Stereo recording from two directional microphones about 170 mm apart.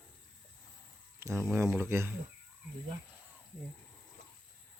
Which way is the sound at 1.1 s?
15° right (ahead or behind).